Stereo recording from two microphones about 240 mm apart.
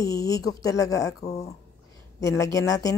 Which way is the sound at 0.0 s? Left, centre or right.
Centre.